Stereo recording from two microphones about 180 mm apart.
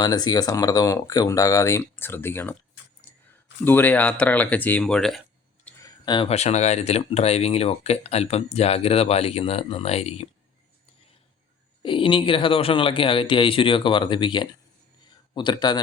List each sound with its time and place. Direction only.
0.0 s speech: 20° left (ahead or behind)
3.1 s clicking: 15° left (ahead or behind)
3.6 s speech: 10° left (ahead or behind)
5.8 s speech: 25° left (ahead or behind)
11.8 s speech: 30° left (ahead or behind)